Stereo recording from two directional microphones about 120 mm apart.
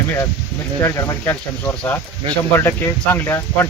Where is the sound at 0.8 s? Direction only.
25° left (ahead or behind).